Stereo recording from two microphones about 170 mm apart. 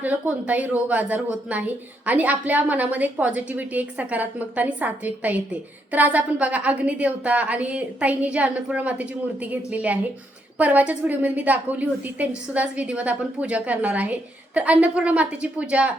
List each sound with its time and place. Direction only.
0.0 s a woman's voice: 10° right (ahead or behind)